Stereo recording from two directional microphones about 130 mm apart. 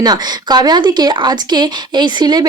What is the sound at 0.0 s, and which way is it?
Speech, 30° right (ahead or behind).